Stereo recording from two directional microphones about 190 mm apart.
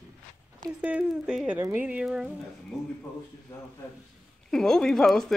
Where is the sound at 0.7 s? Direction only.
5° right (ahead or behind).